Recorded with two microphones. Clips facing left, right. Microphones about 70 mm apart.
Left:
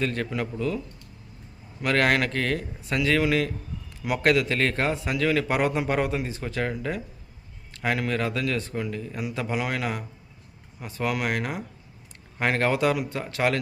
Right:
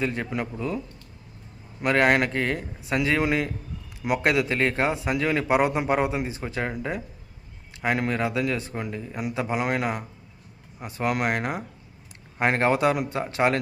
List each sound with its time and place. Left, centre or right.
0.0 s speech: centre
1.8 s speech: right